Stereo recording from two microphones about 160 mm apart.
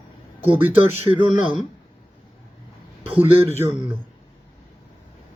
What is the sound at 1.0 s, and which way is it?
Speech, 30° right (ahead or behind).